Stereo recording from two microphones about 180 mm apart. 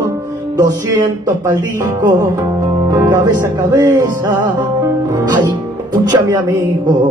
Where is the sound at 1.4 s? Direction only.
20° right (ahead or behind).